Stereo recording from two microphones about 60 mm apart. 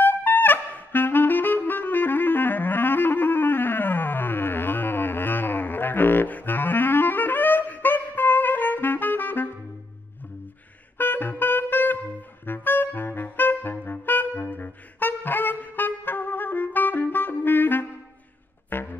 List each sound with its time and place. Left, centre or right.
0.0 s music: left
11.0 s music: left
12.4 s saxophone: left
18.7 s a sound: left